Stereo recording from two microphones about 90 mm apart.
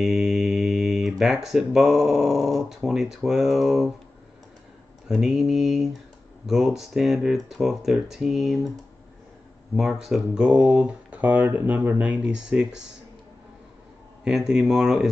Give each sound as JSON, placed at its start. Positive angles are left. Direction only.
{"t": 0.0, "sound": "speech", "side_deg": 0}
{"t": 5.0, "sound": "speech", "side_deg": 0}
{"t": 9.8, "sound": "speech", "side_deg": -5}
{"t": 10.9, "sound": "speech", "side_deg": -15}
{"t": 14.2, "sound": "speech", "side_deg": -5}